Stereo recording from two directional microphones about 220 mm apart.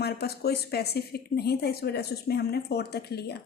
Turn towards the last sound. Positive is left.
turn(degrees=45)  # may be behind; listen again after turning